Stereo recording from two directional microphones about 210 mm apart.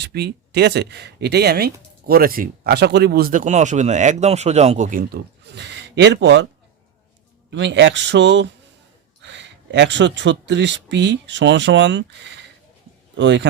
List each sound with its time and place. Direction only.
0.0 s speech: 50° right (ahead or behind)
7.5 s speech: 60° right (ahead or behind)